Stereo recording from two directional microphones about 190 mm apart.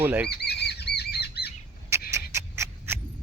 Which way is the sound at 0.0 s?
10° right (ahead or behind).